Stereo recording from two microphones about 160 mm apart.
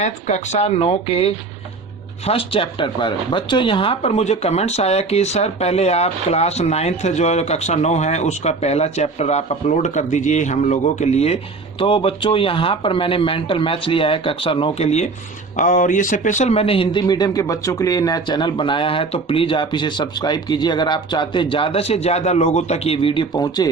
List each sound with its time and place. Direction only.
0.0 s speech: 45° left (ahead or behind)
15.5 s speech: 55° left (ahead or behind); by 23.6 s 25° left (ahead or behind)